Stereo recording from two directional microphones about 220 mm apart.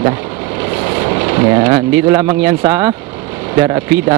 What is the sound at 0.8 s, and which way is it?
Speech, 20° right (ahead or behind).